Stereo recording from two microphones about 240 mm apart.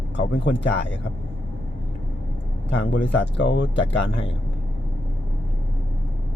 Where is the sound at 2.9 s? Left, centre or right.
Left.